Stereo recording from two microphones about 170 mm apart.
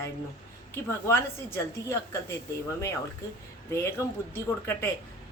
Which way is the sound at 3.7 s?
15° left (ahead or behind).